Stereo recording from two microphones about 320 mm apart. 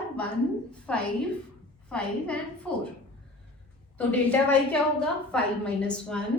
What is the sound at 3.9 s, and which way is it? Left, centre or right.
A woman's voice, centre.